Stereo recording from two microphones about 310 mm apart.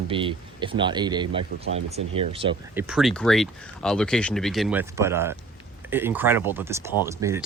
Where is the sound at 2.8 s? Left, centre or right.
Centre.